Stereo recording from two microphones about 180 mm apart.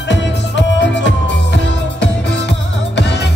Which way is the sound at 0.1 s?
80° left.